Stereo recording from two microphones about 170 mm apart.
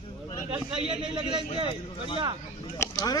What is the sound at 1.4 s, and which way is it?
Speech, 35° right (ahead or behind).